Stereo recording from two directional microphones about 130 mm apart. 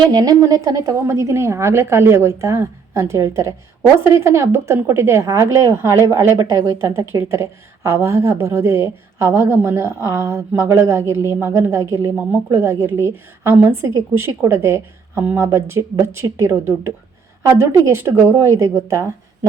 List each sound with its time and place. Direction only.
0.1 s a woman's voice: 30° right (ahead or behind)